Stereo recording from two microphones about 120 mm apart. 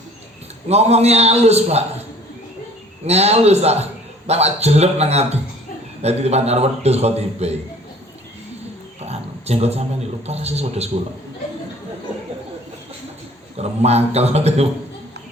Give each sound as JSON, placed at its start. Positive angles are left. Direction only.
{"t": 0.7, "sound": "a man's voice", "side_deg": -60}
{"t": 3.1, "sound": "a man's voice", "side_deg": -60}
{"t": 9.0, "sound": "a sound", "side_deg": -60}
{"t": 10.2, "sound": "a man's voice", "side_deg": -60}
{"t": 13.6, "sound": "a man's voice", "side_deg": -60}